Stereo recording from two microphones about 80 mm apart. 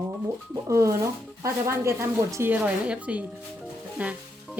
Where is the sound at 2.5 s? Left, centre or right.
Centre.